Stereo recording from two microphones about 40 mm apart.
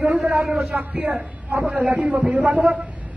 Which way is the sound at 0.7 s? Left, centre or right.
Right.